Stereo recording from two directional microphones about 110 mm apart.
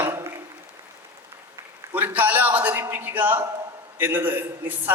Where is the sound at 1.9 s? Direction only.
15° right (ahead or behind).